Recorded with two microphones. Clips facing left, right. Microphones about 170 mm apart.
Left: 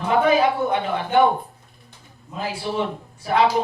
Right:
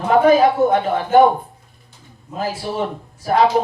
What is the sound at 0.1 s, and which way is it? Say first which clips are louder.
A man's voice: right 5 dB; 40° right (ahead or behind).